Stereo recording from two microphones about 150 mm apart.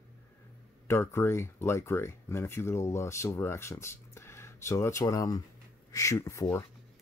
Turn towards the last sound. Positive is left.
turn(degrees=20)  # may be behind; listen again after turning